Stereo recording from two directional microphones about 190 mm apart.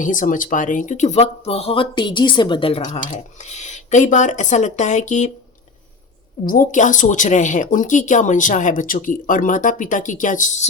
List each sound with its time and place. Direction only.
0.0 s speech: 45° left (ahead or behind)
6.4 s speech: 45° left (ahead or behind)